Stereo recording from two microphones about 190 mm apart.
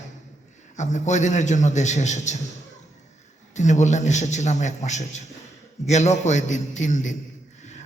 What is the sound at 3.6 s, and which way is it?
A man's voice, 40° left (ahead or behind).